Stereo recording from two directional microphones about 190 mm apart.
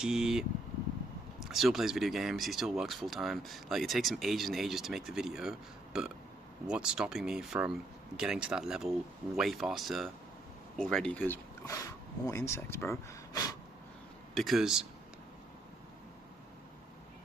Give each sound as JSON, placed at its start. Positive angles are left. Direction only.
{"t": 0.0, "sound": "speech", "side_deg": -5}
{"t": 14.3, "sound": "speech", "side_deg": 0}